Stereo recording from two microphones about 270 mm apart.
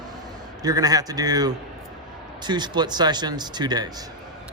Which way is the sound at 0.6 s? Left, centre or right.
Centre.